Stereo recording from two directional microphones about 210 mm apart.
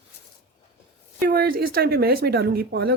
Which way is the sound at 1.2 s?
45° right (ahead or behind).